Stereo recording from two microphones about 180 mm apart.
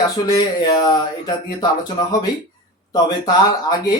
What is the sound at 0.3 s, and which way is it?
Speech, 25° left (ahead or behind).